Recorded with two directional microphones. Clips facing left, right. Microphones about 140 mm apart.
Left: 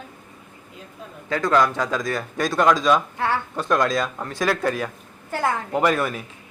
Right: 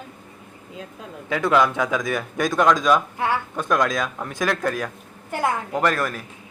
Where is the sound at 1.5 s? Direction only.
5° right (ahead or behind).